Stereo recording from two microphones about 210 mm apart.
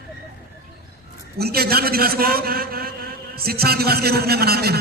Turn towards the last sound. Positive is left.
turn(degrees=-50)  # may be behind; listen again after turning